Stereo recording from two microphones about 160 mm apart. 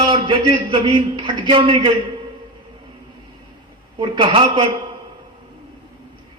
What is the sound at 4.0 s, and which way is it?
Speech, 30° right (ahead or behind).